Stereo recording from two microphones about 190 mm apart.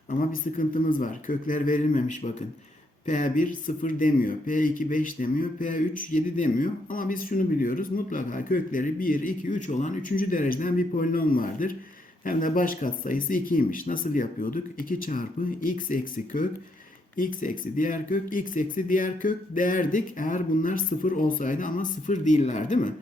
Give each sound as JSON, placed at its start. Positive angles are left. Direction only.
{"t": 0.1, "sound": "speech", "side_deg": 45}